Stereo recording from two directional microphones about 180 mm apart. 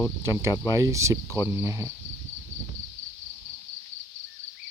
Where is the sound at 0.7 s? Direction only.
15° right (ahead or behind).